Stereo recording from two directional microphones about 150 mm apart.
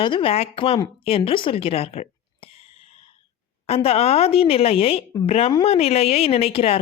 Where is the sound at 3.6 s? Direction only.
40° left (ahead or behind).